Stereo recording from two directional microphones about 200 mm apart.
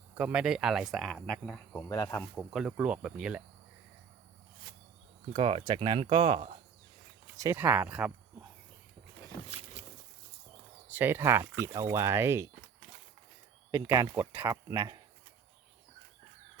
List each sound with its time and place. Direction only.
0.1 s speech: 5° right (ahead or behind); by 2.2 s 15° left (ahead or behind)
2.3 s speech: centre (ahead or behind)
5.3 s speech: 30° right (ahead or behind)
7.3 s speech: 15° right (ahead or behind)
10.9 s speech: 10° right (ahead or behind)
13.7 s speech: 15° right (ahead or behind)